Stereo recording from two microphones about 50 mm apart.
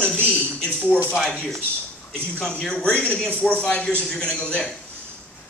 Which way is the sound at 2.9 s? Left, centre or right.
Left.